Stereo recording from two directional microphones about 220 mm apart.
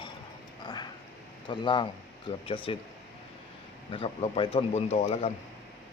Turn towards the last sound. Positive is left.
turn(degrees=30)  # may be behind; listen again after turning